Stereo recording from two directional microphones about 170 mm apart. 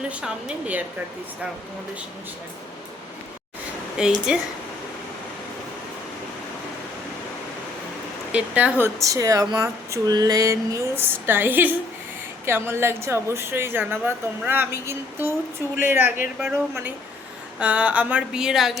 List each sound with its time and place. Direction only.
0.1 s a woman's voice: 5° right (ahead or behind)
3.9 s speech: 5° right (ahead or behind)
8.3 s a woman's voice: 5° right (ahead or behind)
9.0 s a woman's voice: 20° right (ahead or behind); by 18.8 s centre (ahead or behind)